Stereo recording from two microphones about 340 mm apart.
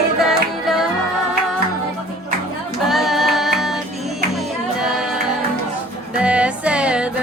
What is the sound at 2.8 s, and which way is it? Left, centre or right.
Music, centre.